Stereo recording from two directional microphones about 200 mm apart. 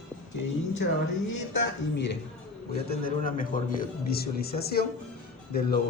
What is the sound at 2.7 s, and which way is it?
A man's voice, 50° left (ahead or behind).